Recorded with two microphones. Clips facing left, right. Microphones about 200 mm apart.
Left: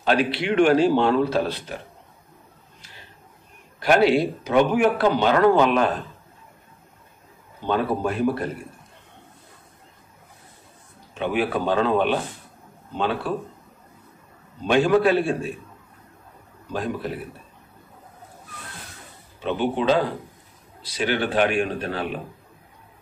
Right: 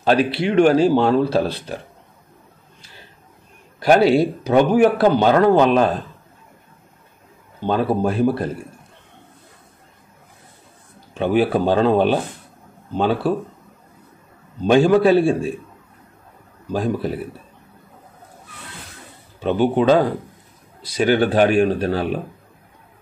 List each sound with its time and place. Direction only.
0.0 s speech: 35° right (ahead or behind)
3.8 s speech: 40° right (ahead or behind)
7.6 s speech: 35° right (ahead or behind)
11.1 s speech: 35° right (ahead or behind)
14.6 s speech: 35° right (ahead or behind)
19.4 s speech: 45° right (ahead or behind)